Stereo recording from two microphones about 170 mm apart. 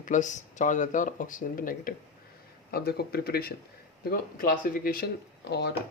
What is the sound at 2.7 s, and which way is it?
Speech, 70° left (ahead or behind).